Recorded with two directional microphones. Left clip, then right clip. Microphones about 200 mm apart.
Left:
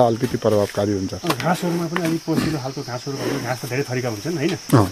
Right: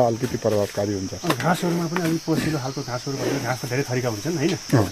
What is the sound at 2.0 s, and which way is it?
Speech, 20° left (ahead or behind).